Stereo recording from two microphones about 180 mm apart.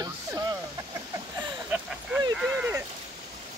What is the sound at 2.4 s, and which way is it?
Speech, 10° right (ahead or behind).